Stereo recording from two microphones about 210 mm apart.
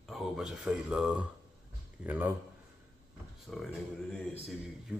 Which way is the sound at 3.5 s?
Centre (ahead or behind).